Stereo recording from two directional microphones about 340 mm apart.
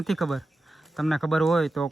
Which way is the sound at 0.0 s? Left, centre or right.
Centre.